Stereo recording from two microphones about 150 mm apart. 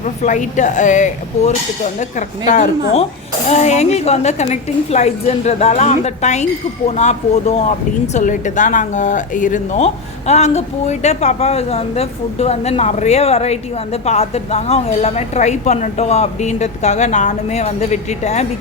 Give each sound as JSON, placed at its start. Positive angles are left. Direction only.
{"t": 0.0, "sound": "speech", "side_deg": 55}
{"t": 3.5, "sound": "a woman's voice", "side_deg": 50}